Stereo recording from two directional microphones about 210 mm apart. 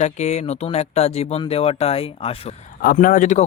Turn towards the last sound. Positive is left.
turn(degrees=35)  # may be behind; listen again after turning